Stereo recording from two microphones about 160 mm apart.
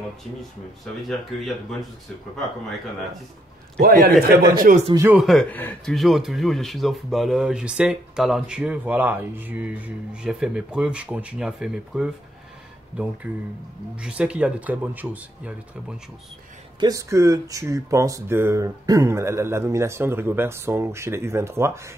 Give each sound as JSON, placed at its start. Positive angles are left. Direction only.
{"t": 1.0, "sound": "speech", "side_deg": 0}
{"t": 3.7, "sound": "a man's voice", "side_deg": -70}
{"t": 5.1, "sound": "speech", "side_deg": 0}
{"t": 5.5, "sound": "speech", "side_deg": 10}
{"t": 5.9, "sound": "speech", "side_deg": 0}
{"t": 16.8, "sound": "speech", "side_deg": -20}